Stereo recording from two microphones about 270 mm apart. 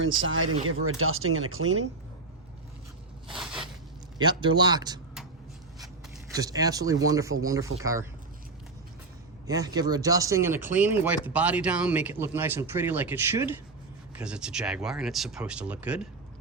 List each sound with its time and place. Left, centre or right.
0.0 s speech: right
3.2 s a sound: centre
4.2 s speech: centre
6.3 s speech: centre
9.5 s speech: centre